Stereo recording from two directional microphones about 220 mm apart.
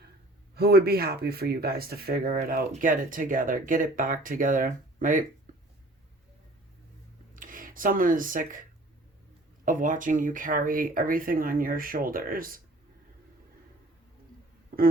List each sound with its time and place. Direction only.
0.5 s speech: 45° right (ahead or behind)
7.3 s speech: 40° right (ahead or behind)
9.6 s speech: 35° right (ahead or behind)